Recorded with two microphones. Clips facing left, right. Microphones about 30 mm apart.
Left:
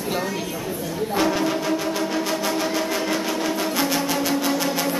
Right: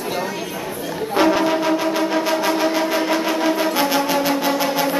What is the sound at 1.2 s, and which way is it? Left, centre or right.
Music, centre.